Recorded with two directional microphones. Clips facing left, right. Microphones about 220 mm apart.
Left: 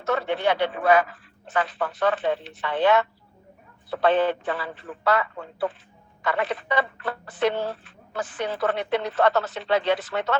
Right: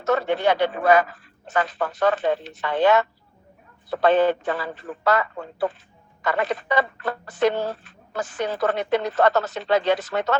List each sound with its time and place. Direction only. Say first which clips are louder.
0.0 s speech: right 3 dB; 40° right (ahead or behind)